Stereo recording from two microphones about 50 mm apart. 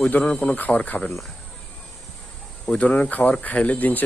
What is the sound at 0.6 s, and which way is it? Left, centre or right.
Speech, left.